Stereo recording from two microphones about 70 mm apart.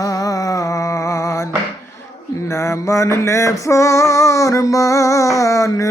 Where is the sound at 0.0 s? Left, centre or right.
Left.